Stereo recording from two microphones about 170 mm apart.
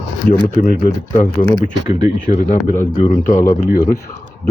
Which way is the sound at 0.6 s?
50° left (ahead or behind).